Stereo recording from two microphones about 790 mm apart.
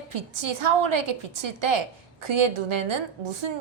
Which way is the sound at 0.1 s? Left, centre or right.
Right.